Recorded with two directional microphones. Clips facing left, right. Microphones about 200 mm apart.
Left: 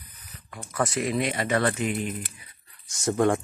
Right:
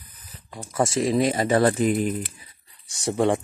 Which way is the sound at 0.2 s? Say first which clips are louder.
Right 3 dB; 30° right (ahead or behind).